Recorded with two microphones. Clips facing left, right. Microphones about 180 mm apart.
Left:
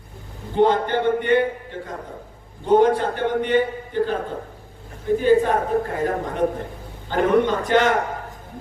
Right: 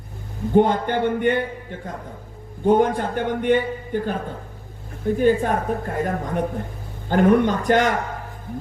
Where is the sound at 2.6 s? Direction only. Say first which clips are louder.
Left 1 dB; 50° right (ahead or behind).